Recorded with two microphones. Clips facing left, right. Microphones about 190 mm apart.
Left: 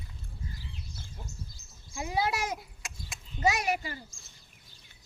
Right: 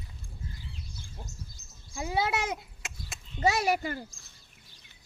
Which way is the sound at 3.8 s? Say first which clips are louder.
Right 6 dB; 55° right (ahead or behind).